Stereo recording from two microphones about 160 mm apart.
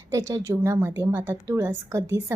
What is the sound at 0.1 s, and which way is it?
A woman's voice, 20° right (ahead or behind).